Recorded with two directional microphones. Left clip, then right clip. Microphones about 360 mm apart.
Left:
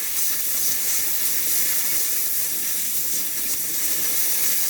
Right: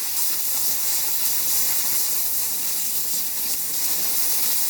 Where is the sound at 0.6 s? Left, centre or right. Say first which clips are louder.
Left 1 dB; right.